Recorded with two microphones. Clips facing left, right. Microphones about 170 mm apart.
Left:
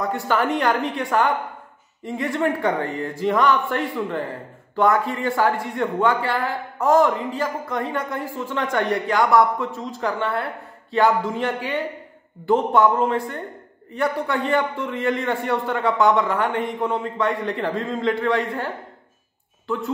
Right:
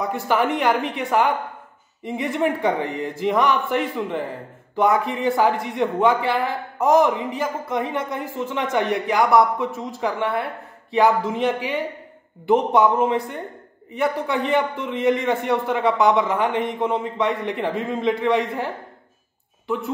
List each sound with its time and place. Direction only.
0.3 s a woman's voice: 20° right (ahead or behind)